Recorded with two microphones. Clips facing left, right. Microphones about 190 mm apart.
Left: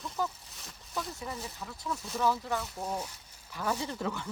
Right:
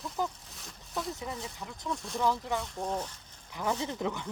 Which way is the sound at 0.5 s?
Centre (ahead or behind).